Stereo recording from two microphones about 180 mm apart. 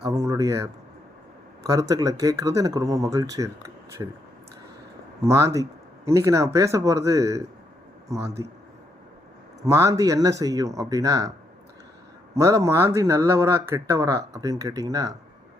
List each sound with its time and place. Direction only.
0.1 s speech: 15° right (ahead or behind)
5.2 s speech: 15° right (ahead or behind)
9.6 s speech: 15° right (ahead or behind)
12.3 s speech: 15° right (ahead or behind)